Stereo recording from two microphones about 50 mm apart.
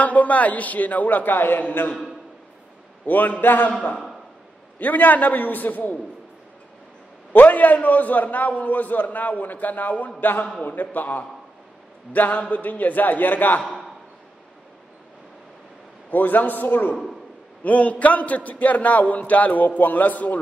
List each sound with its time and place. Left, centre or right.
0.0 s a man's voice: left
3.1 s a man's voice: left
4.7 s a man's voice: left
7.3 s a man's voice: left
16.1 s a man's voice: left
17.6 s a man's voice: left